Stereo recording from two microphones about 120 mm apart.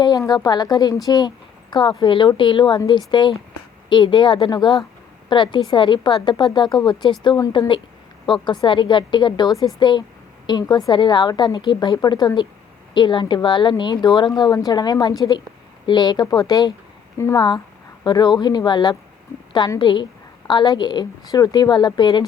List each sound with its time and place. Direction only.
0.0 s a woman's voice: 35° left (ahead or behind)
9.5 s speech: centre (ahead or behind)
9.7 s a woman's voice: 40° left (ahead or behind)